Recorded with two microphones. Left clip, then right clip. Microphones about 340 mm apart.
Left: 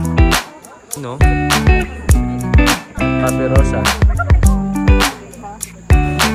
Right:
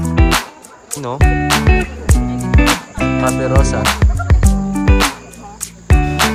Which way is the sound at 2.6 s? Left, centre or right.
Right.